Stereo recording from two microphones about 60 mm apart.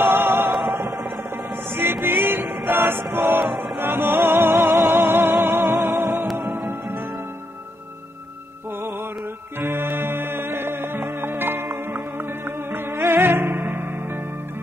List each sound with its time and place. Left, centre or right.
0.0 s music: right
9.6 s music: right